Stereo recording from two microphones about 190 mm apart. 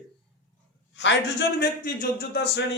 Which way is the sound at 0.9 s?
70° left (ahead or behind).